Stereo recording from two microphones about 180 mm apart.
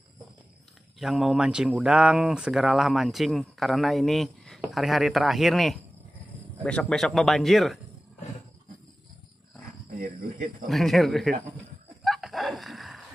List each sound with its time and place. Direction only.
0.9 s speech: centre (ahead or behind)
9.9 s speech: 55° right (ahead or behind)
10.7 s speech: centre (ahead or behind)
12.0 s a sound: centre (ahead or behind)